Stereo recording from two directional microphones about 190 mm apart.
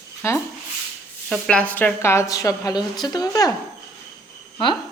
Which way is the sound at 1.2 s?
5° left (ahead or behind).